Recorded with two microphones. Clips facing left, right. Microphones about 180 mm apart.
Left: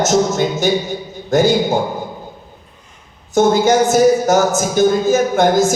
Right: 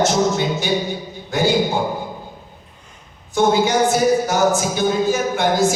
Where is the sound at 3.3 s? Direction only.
45° left (ahead or behind).